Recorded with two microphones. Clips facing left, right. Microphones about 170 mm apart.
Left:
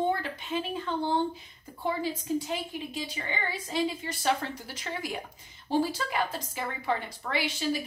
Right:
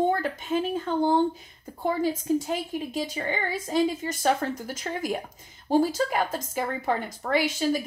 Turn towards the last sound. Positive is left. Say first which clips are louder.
# right 6 dB
turn(degrees=-45)  # may be behind; listen again after turning